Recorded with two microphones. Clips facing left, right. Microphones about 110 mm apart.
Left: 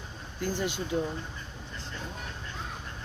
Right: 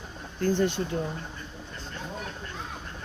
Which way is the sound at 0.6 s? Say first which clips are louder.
Right 6 dB; 10° left (ahead or behind).